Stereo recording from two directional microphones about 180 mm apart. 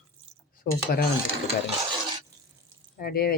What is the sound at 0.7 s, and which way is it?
Speech, 50° left (ahead or behind).